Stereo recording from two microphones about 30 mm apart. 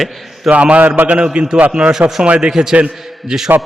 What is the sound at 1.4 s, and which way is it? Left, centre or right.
Speech, right.